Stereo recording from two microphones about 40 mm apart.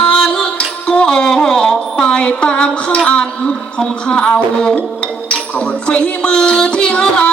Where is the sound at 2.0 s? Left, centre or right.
Left.